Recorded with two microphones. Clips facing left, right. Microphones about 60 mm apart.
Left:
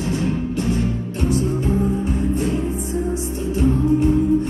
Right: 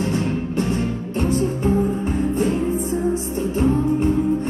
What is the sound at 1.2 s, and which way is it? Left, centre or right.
Music, right.